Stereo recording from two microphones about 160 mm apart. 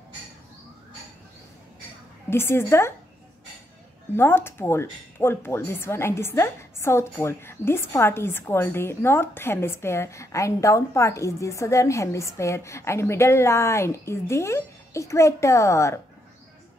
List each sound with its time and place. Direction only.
2.2 s speech: 15° left (ahead or behind)
4.1 s speech: 15° left (ahead or behind)